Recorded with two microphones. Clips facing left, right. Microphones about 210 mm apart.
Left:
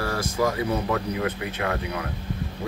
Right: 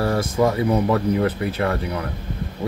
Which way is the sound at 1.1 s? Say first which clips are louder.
Right 7 dB; 40° right (ahead or behind).